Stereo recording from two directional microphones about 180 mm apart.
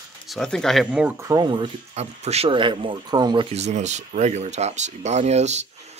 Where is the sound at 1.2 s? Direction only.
20° right (ahead or behind).